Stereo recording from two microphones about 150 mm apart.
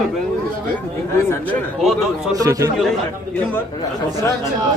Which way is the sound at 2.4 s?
20° right (ahead or behind).